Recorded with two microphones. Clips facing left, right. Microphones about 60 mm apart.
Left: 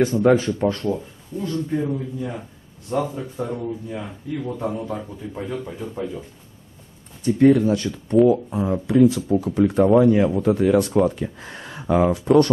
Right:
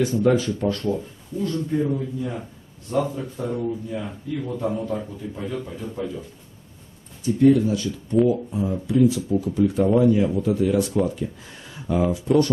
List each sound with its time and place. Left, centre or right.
0.0 s speech: left; by 1.8 s centre
1.9 s a man's voice: centre
7.2 s speech: left